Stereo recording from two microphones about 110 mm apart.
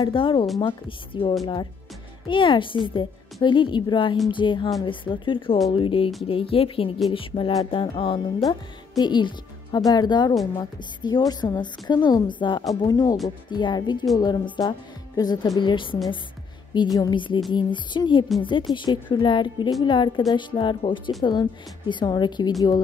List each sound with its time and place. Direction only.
0.1 s a woman's voice: 50° left (ahead or behind)
8.5 s a woman's voice: 40° left (ahead or behind)
15.6 s a woman's voice: 50° left (ahead or behind)
16.7 s a woman's voice: 40° left (ahead or behind)